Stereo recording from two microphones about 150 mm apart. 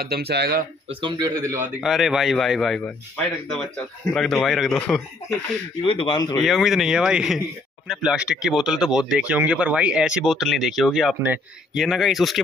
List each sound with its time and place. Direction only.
0.0 s speech: 90° right
0.8 s speech: 30° right (ahead or behind)
1.3 s a man's voice: 15° right (ahead or behind)
1.8 s speech: centre (ahead or behind)
5.8 s a man's voice: 35° left (ahead or behind)
6.4 s speech: centre (ahead or behind)